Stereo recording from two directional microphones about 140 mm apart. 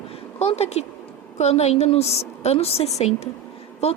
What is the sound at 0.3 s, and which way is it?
A woman's voice, 50° left (ahead or behind).